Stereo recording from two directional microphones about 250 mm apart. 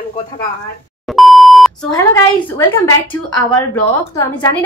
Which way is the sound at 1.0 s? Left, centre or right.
Centre.